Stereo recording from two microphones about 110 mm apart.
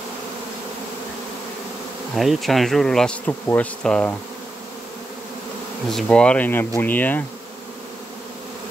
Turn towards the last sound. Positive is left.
turn(degrees=15)  # may be behind; listen again after turning